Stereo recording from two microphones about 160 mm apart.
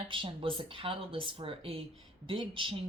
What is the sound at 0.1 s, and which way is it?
Speech, 35° right (ahead or behind).